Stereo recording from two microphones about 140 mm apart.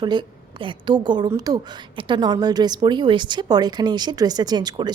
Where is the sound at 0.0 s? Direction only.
30° right (ahead or behind).